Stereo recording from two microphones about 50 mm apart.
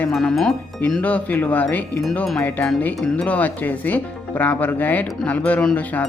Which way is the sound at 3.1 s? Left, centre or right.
Left.